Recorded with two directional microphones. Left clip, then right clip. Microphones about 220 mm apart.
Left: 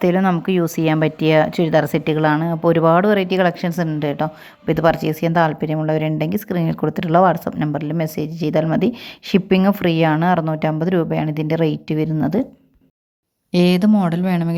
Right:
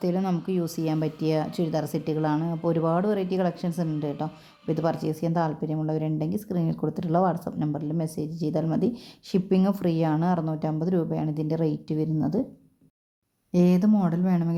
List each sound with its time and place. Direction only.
0.1 s a woman's voice: 15° left (ahead or behind)
13.5 s speech: 20° left (ahead or behind)